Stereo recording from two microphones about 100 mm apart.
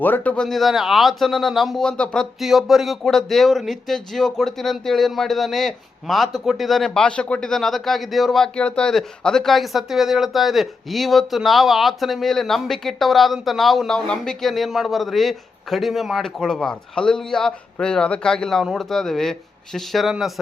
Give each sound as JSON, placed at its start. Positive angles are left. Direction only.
{"t": 0.0, "sound": "a man's voice", "side_deg": 15}
{"t": 0.4, "sound": "speech", "side_deg": 0}
{"t": 2.4, "sound": "speech", "side_deg": 0}